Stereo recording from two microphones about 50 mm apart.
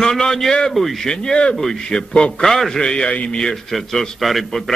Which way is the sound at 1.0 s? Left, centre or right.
Centre.